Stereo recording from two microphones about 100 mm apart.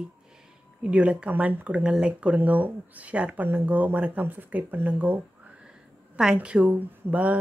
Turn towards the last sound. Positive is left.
turn(degrees=-15)  # may be behind; listen again after turning